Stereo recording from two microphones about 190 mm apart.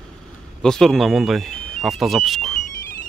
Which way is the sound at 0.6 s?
Centre (ahead or behind).